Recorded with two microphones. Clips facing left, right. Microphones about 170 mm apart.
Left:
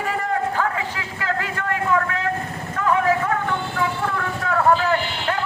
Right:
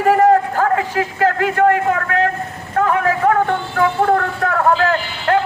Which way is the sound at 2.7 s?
55° right (ahead or behind).